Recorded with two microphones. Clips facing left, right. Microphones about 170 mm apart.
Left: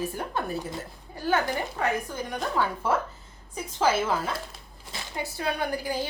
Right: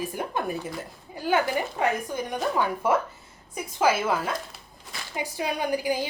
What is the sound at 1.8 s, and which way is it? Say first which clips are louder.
Speech: right 2 dB; 20° right (ahead or behind).